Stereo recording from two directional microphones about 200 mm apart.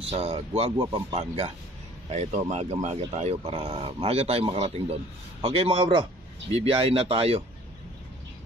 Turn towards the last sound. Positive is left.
turn(degrees=-30)  # may be behind; listen again after turning